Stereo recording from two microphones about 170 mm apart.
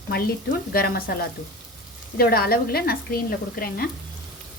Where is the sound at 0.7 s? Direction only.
60° left (ahead or behind).